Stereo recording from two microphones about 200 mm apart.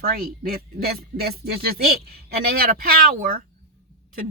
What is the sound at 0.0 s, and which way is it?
Speech, 50° right (ahead or behind).